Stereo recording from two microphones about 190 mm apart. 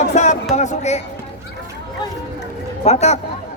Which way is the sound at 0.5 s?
40° left (ahead or behind).